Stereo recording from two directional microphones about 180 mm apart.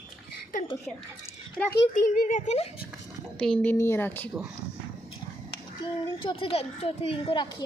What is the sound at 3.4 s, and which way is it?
Speech, 5° left (ahead or behind).